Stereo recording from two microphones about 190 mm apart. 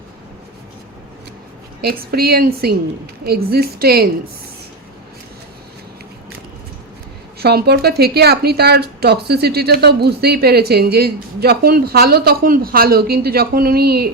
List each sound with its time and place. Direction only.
1.8 s a woman's voice: 55° right (ahead or behind)
7.3 s a woman's voice: 60° right (ahead or behind)